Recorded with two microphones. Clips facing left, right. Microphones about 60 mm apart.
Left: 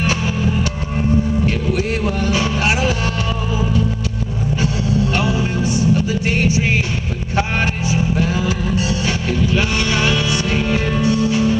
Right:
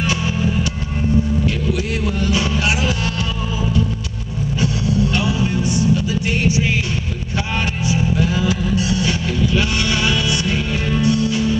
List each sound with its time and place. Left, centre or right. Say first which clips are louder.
2.3 s vehicle: left 1 dB; left
5.1 s music: left 1 dB; left